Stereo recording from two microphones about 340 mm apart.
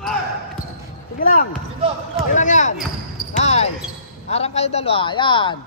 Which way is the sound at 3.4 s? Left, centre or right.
Centre.